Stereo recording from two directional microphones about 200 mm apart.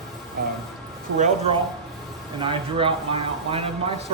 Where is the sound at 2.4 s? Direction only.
25° right (ahead or behind).